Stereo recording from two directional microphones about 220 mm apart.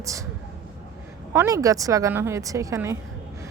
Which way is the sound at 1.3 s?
15° right (ahead or behind).